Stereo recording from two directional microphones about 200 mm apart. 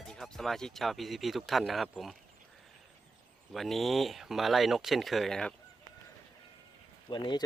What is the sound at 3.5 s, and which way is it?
Speech, centre (ahead or behind).